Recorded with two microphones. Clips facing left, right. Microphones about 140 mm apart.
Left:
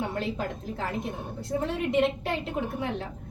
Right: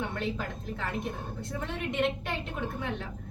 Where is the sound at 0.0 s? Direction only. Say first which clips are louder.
Left 3 dB; 35° left (ahead or behind).